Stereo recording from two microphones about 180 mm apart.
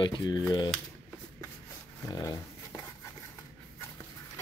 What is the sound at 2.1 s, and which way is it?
Speech, 20° left (ahead or behind).